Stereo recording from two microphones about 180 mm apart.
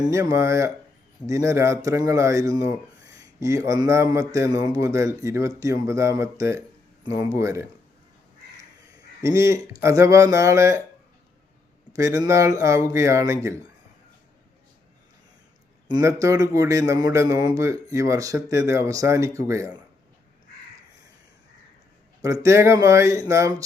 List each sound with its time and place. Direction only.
0.1 s speech: 15° right (ahead or behind)
9.2 s speech: 15° right (ahead or behind)
11.9 s speech: 20° right (ahead or behind)
15.9 s speech: 15° right (ahead or behind)
22.2 s speech: 15° right (ahead or behind)